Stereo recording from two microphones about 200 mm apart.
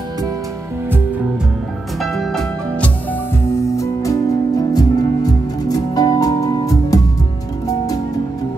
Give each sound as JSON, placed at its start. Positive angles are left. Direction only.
{"t": 2.0, "sound": "music", "side_deg": 0}
{"t": 3.7, "sound": "music", "side_deg": 15}